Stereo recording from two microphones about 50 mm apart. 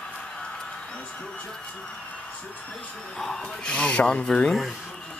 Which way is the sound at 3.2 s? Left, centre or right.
Centre.